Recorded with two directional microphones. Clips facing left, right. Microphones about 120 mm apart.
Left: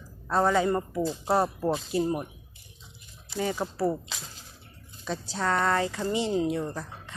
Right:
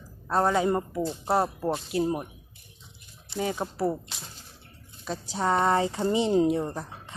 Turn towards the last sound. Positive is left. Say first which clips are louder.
# right 1 dB
turn(degrees=-20)  # may be behind; listen again after turning